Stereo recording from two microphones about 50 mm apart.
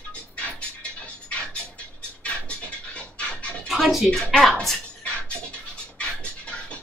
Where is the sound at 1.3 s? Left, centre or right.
Left.